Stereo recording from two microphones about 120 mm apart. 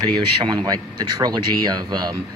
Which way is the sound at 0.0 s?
35° right (ahead or behind).